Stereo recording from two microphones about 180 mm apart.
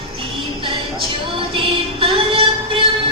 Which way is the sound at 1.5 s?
30° right (ahead or behind).